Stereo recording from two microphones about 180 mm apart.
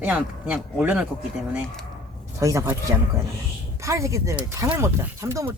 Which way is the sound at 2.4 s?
15° right (ahead or behind).